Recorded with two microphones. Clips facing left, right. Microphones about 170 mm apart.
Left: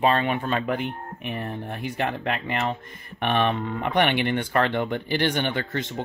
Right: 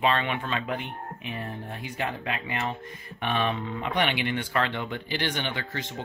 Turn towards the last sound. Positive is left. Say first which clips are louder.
# left 6 dB
turn(degrees=50)  # may be behind; listen again after turning